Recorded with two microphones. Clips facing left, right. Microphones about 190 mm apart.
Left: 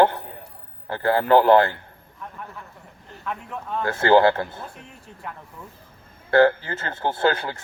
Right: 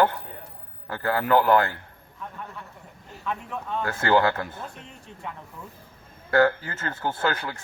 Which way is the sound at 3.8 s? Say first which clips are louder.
Left 5 dB; 30° left (ahead or behind).